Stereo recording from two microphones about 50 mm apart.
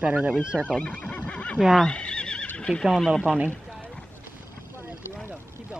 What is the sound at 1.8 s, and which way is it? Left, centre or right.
Neigh, left.